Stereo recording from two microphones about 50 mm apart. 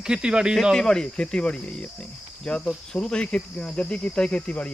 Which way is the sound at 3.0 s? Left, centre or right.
Centre.